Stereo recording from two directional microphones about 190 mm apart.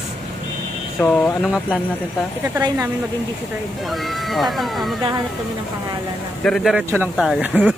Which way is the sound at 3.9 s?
Centre (ahead or behind).